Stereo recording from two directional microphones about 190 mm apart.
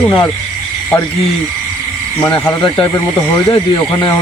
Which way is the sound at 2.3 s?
25° left (ahead or behind).